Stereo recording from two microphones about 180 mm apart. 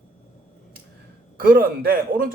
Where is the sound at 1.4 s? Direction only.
55° right (ahead or behind).